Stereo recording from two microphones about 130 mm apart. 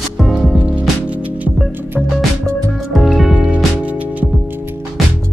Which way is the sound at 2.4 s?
Centre (ahead or behind).